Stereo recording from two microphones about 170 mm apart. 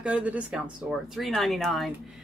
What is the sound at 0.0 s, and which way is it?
Speech, 5° right (ahead or behind).